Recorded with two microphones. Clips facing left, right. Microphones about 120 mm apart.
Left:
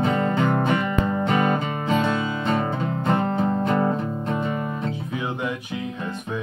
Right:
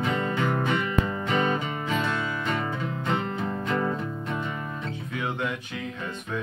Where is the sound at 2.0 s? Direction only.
35° left (ahead or behind).